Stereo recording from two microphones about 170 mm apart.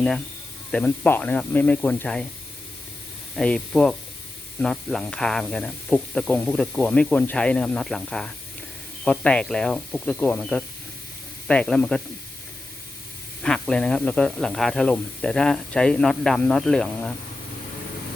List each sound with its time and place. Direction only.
0.7 s speech: 10° left (ahead or behind)
3.3 s speech: 5° left (ahead or behind)
13.4 s speech: 5° left (ahead or behind)